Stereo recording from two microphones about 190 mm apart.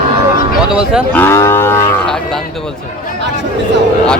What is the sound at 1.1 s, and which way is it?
Cattle, 15° left (ahead or behind).